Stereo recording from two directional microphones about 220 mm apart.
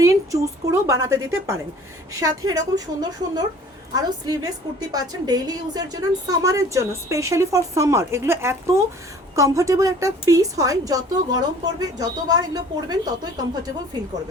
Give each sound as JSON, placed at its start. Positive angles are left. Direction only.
{"t": 0.0, "sound": "a woman's voice", "side_deg": -15}